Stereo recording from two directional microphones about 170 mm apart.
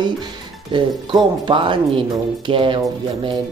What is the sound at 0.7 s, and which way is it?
Speech, 25° right (ahead or behind).